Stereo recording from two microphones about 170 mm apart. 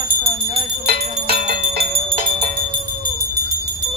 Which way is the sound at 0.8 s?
65° right (ahead or behind).